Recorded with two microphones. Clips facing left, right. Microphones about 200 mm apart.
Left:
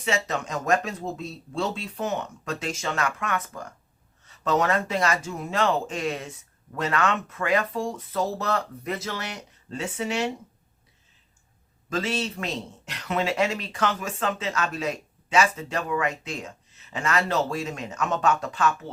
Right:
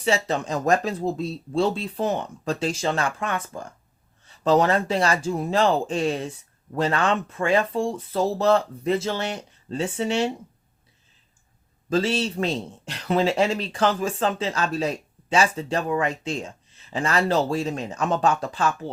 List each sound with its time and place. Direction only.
0.0 s a man's voice: 30° right (ahead or behind)
11.9 s a man's voice: 30° right (ahead or behind)